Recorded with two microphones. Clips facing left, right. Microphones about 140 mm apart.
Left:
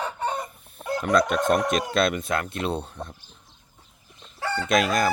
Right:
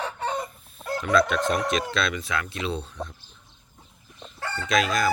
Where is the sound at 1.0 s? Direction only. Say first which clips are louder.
Left 1 dB; 45° left (ahead or behind).